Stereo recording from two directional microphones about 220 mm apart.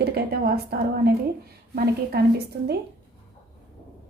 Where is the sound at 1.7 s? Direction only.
45° right (ahead or behind).